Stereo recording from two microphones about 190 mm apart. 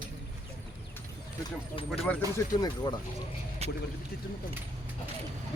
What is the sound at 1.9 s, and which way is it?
Speech, 10° left (ahead or behind).